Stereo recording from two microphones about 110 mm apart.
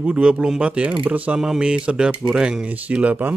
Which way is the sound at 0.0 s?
10° right (ahead or behind).